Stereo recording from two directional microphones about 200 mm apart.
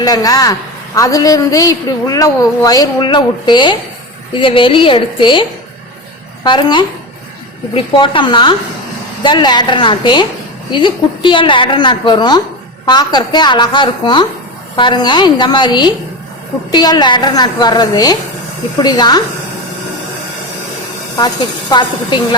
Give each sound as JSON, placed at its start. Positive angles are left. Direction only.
{"t": 0.0, "sound": "a woman's voice", "side_deg": 20}
{"t": 21.7, "sound": "a woman's voice", "side_deg": 20}